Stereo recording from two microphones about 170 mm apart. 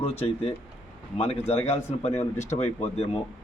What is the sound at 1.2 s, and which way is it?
Speech, 35° left (ahead or behind).